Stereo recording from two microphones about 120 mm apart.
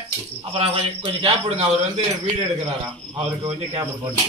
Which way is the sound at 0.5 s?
50° right (ahead or behind).